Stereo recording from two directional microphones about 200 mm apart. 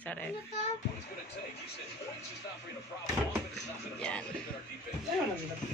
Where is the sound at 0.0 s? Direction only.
5° left (ahead or behind).